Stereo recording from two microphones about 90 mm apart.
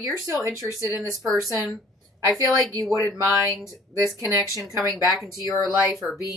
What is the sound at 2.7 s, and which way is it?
Speech, 35° right (ahead or behind).